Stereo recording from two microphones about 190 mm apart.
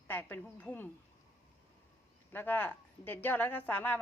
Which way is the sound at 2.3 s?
10° left (ahead or behind).